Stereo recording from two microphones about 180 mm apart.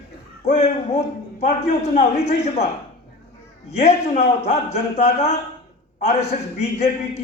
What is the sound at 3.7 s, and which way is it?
A man's voice, 35° left (ahead or behind).